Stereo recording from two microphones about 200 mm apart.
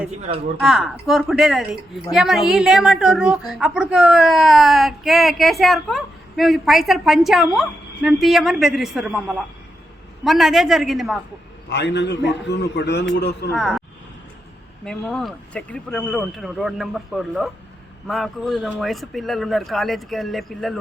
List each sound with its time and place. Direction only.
0.6 s a woman's voice: centre (ahead or behind)
11.7 s a man's voice: 60° left (ahead or behind)
13.6 s speech: centre (ahead or behind)
14.8 s a woman's voice: 5° left (ahead or behind)